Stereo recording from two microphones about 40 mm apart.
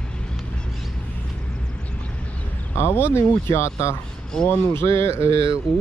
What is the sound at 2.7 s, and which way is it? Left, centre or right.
Speech, left.